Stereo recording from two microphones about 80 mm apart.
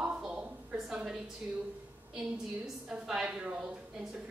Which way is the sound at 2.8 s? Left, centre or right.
Centre.